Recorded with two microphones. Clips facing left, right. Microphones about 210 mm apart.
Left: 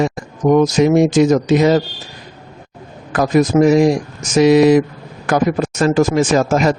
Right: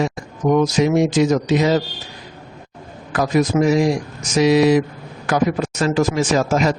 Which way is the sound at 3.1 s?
50° left (ahead or behind).